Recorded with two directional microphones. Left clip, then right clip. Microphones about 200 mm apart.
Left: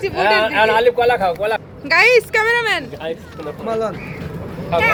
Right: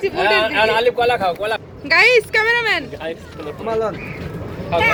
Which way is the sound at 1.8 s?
Centre (ahead or behind).